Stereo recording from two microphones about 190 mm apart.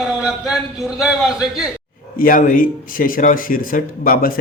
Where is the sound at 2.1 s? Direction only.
45° left (ahead or behind).